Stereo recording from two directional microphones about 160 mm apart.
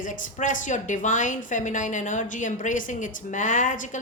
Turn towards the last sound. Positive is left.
turn(degrees=55)  # may be behind; listen again after turning